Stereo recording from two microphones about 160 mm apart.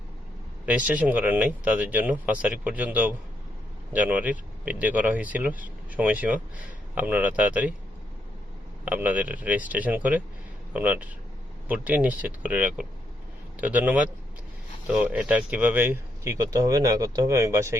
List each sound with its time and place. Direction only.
0.6 s speech: 10° right (ahead or behind)
8.8 s speech: 10° right (ahead or behind)